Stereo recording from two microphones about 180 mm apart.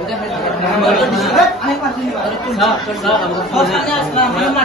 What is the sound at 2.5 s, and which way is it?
Speech, centre (ahead or behind).